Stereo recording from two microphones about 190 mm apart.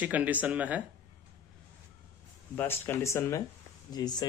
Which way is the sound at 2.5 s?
10° left (ahead or behind).